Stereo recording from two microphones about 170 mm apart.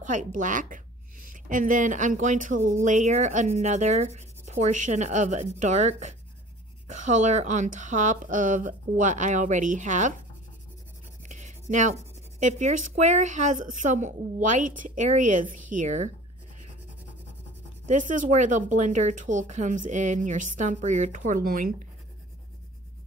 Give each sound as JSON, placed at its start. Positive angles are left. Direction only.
{"t": 0.0, "sound": "speech", "side_deg": -45}
{"t": 11.2, "sound": "writing", "side_deg": -45}
{"t": 11.7, "sound": "speech", "side_deg": -45}
{"t": 17.8, "sound": "speech", "side_deg": -50}